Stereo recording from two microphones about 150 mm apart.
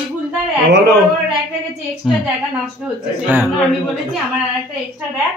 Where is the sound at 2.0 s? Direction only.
5° right (ahead or behind).